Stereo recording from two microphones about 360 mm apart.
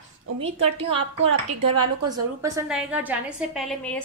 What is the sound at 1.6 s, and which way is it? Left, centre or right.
Speech, right.